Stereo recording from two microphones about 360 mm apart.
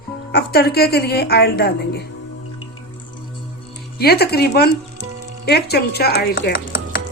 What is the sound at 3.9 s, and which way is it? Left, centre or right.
A woman's voice, left.